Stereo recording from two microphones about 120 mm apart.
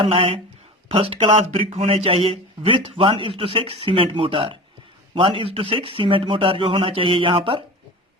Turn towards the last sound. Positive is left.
turn(degrees=-50)  # may be behind; listen again after turning